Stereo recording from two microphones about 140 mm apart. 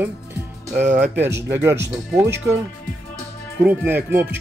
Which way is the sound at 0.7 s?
60° right (ahead or behind).